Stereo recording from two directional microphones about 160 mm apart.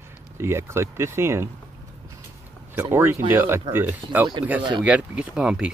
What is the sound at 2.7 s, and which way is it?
Speech, 15° right (ahead or behind).